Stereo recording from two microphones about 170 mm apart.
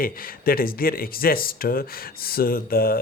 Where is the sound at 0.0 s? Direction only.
60° left (ahead or behind).